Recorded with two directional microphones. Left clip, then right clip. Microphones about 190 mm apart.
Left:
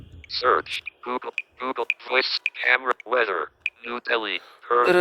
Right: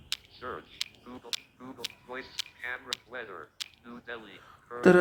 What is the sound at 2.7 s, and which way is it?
Speech, 75° left (ahead or behind).